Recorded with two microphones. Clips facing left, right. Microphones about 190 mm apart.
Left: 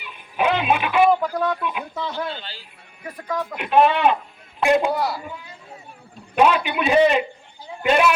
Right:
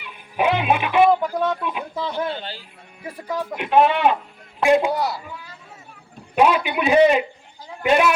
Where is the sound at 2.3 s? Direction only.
50° right (ahead or behind).